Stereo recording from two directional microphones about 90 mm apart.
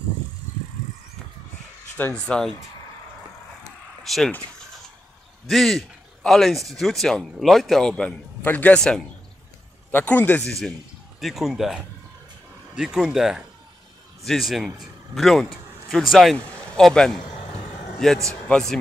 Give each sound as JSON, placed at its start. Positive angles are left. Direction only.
{"t": 2.1, "sound": "speech", "side_deg": 10}
{"t": 4.0, "sound": "vehicle", "side_deg": 5}
{"t": 5.5, "sound": "a man's voice", "side_deg": 0}
{"t": 9.8, "sound": "speech", "side_deg": 20}
{"t": 10.4, "sound": "a man's voice", "side_deg": 5}